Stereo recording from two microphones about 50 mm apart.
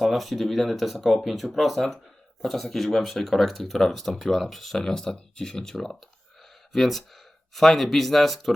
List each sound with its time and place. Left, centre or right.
0.0 s speech: centre